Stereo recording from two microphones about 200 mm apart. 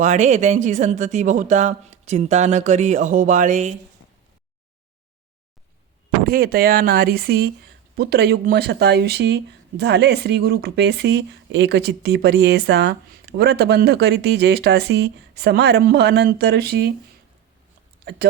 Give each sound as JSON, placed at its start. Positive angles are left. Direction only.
{"t": 0.0, "sound": "speech", "side_deg": -35}
{"t": 6.2, "sound": "speech", "side_deg": -45}